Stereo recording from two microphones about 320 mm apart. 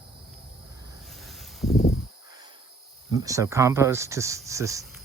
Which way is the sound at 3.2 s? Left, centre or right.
Centre.